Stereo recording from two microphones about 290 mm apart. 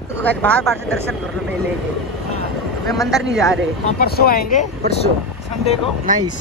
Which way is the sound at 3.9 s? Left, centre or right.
Left.